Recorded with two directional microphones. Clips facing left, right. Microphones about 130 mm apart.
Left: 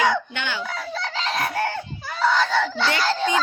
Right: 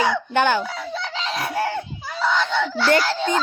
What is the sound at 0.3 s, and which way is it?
Speech, 45° right (ahead or behind).